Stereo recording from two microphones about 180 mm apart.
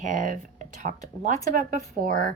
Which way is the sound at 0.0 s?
45° right (ahead or behind).